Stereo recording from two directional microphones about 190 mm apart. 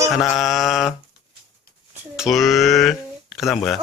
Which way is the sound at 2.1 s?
Centre (ahead or behind).